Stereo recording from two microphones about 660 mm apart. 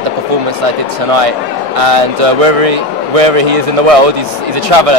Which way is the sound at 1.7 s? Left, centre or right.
Right.